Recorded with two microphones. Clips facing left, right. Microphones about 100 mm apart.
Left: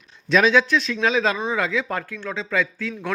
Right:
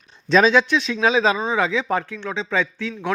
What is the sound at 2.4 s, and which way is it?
Speech, 25° right (ahead or behind).